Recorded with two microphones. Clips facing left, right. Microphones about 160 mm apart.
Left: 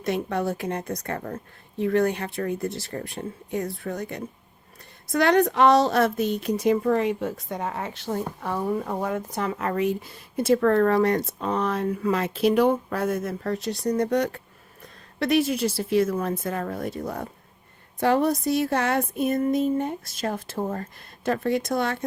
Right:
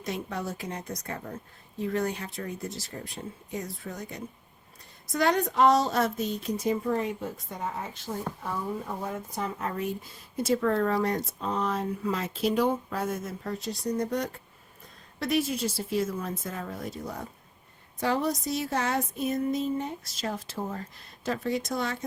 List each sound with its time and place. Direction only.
0.0 s speech: 60° left (ahead or behind)